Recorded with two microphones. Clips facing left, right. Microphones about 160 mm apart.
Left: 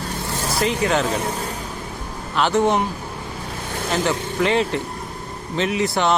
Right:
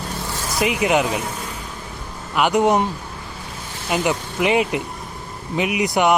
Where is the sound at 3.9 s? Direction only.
15° right (ahead or behind).